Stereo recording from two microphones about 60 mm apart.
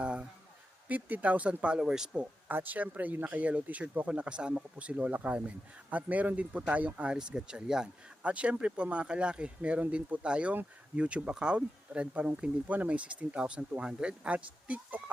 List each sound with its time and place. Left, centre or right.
0.0 s a sound: centre
0.9 s speech: right; by 2.2 s centre
2.5 s speech: right